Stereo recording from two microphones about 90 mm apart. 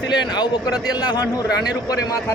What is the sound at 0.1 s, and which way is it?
A man's voice, 50° left (ahead or behind).